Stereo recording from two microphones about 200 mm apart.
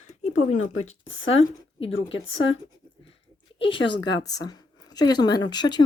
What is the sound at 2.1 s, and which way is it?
Speech, 70° left (ahead or behind).